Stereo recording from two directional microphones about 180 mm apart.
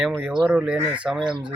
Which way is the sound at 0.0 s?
Centre (ahead or behind).